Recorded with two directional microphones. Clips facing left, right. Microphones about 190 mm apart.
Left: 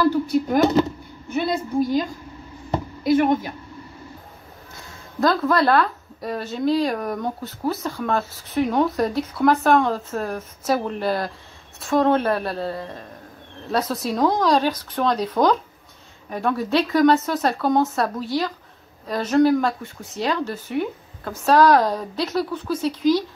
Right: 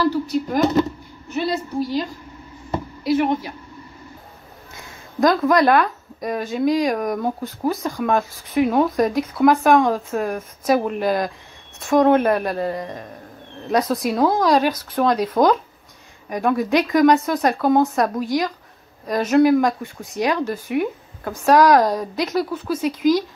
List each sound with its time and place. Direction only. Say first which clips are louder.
1.4 s a woman's voice: left 1 dB; 50° left (ahead or behind)
5.2 s speech: right 3 dB; 15° right (ahead or behind)